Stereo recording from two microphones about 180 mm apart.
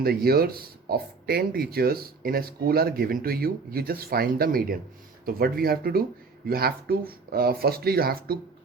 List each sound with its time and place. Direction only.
0.0 s speech: 60° right (ahead or behind)